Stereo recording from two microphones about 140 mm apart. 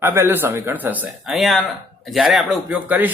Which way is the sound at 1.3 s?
Centre (ahead or behind).